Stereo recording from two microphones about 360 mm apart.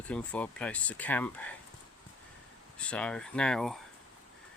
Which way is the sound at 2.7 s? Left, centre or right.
Centre.